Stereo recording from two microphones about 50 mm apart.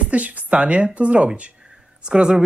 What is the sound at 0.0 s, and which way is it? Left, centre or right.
Speech, right.